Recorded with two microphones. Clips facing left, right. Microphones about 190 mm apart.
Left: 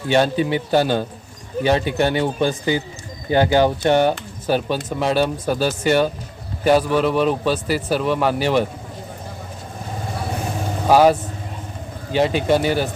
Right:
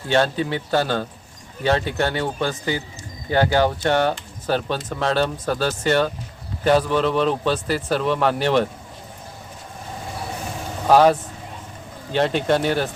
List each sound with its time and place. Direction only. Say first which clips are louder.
0.1 s speech: left 3 dB; 15° left (ahead or behind)
10.8 s speech: left 1 dB; 5° left (ahead or behind)